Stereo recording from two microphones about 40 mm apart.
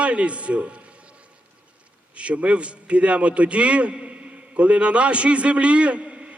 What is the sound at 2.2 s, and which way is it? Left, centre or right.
A man's voice, right.